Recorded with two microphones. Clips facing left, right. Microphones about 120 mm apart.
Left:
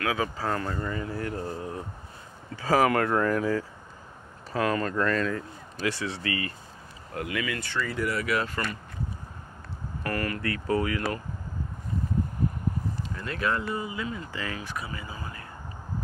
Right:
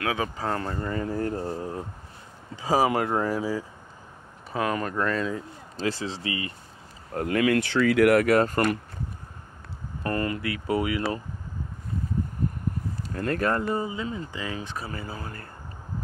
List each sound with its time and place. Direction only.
0.0 s speech: 25° right (ahead or behind)
2.5 s speech: 15° right (ahead or behind)
5.8 s speech: 30° right (ahead or behind)
7.2 s speech: 45° right (ahead or behind)
7.5 s speech: 75° right (ahead or behind)
8.3 s speech: 50° right (ahead or behind)
10.0 s speech: 25° right (ahead or behind)
10.4 s speech: 10° right (ahead or behind)
13.1 s speech: 50° right (ahead or behind)
13.7 s speech: 30° right (ahead or behind)
14.9 s speech: 40° right (ahead or behind)
15.1 s speech: 55° right (ahead or behind)